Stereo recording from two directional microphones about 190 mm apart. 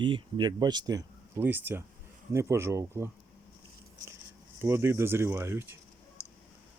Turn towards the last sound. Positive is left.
turn(degrees=-15)  # may be behind; listen again after turning